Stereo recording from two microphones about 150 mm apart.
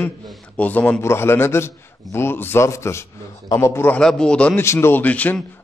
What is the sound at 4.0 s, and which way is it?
A man's voice, 5° left (ahead or behind).